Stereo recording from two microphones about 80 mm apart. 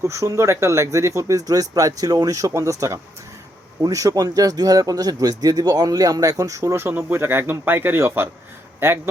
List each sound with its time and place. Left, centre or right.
0.0 s speech: right